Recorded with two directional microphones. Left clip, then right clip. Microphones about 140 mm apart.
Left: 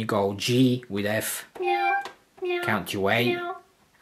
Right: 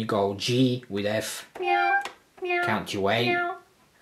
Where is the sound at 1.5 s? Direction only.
10° left (ahead or behind).